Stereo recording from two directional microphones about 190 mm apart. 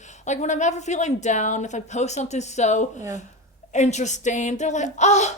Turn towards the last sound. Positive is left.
turn(degrees=35)  # may be behind; listen again after turning